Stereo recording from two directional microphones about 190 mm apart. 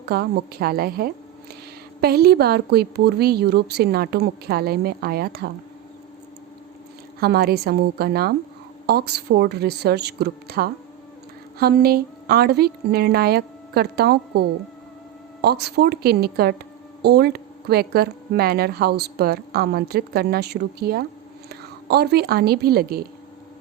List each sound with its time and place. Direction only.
0.0 s a woman's voice: 55° right (ahead or behind)
7.2 s a woman's voice: 55° right (ahead or behind)